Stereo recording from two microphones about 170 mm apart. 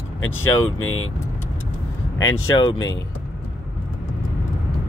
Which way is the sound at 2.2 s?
25° left (ahead or behind).